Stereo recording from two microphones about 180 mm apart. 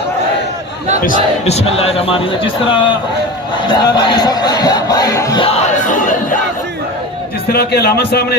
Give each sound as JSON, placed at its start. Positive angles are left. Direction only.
{"t": 1.0, "sound": "speech", "side_deg": 45}
{"t": 5.4, "sound": "speech", "side_deg": 35}
{"t": 7.5, "sound": "speech", "side_deg": 60}